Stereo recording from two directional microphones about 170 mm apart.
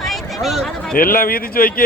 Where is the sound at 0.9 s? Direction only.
55° left (ahead or behind).